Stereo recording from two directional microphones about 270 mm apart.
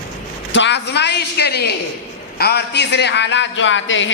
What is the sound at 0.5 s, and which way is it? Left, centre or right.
A man's voice, left.